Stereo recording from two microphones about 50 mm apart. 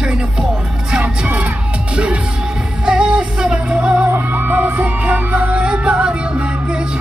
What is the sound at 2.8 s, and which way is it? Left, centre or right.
Music, centre.